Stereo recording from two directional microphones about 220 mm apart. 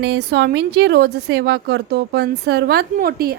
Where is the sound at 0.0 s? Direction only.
50° right (ahead or behind).